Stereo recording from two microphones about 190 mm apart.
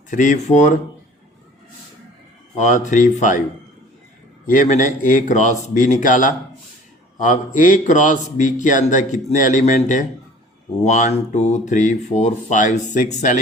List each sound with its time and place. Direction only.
0.1 s speech: 40° left (ahead or behind)
2.6 s speech: 40° left (ahead or behind)
4.4 s a man's voice: 40° left (ahead or behind)